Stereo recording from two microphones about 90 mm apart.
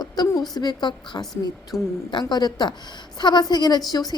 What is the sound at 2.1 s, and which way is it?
Speech, 55° left (ahead or behind).